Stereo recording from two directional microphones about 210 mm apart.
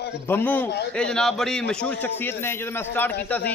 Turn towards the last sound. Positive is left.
turn(degrees=10)  # may be behind; listen again after turning